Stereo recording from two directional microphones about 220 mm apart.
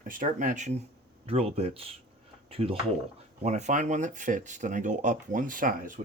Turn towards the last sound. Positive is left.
turn(degrees=-40)  # may be behind; listen again after turning